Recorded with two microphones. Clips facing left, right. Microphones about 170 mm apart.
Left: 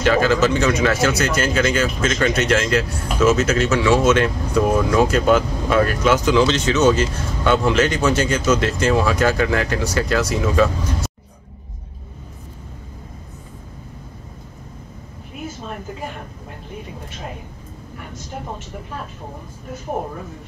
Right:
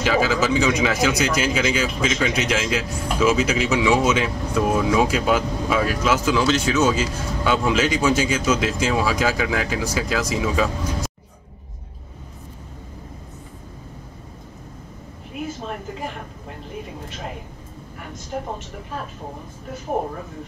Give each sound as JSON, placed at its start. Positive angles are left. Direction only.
{"t": 0.0, "sound": "speech", "side_deg": -5}